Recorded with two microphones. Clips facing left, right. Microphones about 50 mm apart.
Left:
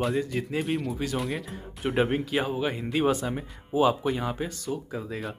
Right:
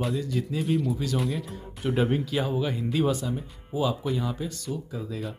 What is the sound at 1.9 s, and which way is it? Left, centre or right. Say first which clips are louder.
Speech: left 1 dB; left.